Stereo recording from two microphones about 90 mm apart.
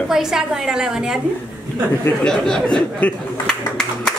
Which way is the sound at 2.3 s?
10° left (ahead or behind).